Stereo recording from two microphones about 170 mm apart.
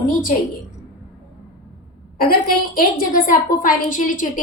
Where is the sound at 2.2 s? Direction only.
60° left (ahead or behind).